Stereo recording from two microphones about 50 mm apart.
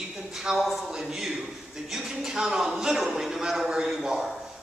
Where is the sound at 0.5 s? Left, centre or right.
Centre.